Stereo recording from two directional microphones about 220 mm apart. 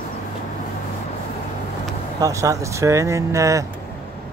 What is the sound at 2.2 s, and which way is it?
Speech, 15° right (ahead or behind).